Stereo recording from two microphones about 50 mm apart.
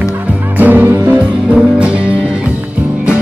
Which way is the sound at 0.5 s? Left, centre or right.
Right.